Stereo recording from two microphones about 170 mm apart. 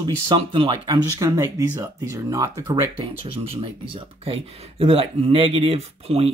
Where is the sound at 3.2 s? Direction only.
35° right (ahead or behind).